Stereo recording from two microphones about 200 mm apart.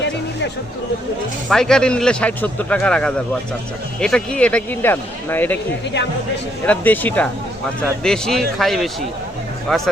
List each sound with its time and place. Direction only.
1.5 s speech: 5° left (ahead or behind)
6.7 s speech: 10° left (ahead or behind)